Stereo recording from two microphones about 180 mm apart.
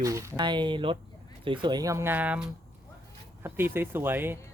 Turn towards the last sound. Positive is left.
turn(degrees=-10)  # may be behind; listen again after turning